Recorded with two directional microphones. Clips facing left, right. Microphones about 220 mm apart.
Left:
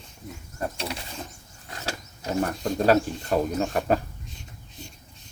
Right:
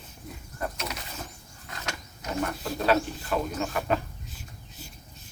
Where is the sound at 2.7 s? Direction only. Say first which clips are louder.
Left 4 dB; 40° left (ahead or behind).